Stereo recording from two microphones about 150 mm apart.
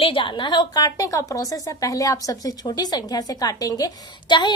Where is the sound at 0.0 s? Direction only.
35° left (ahead or behind).